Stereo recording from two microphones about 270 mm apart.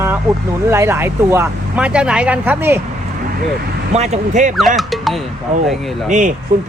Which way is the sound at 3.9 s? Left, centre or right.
Right.